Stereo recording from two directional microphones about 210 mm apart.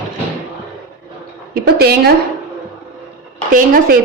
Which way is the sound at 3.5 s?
40° right (ahead or behind).